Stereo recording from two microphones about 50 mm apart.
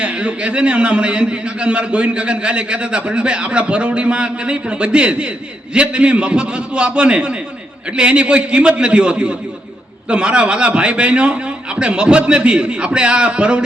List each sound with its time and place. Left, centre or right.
0.0 s a man's voice: right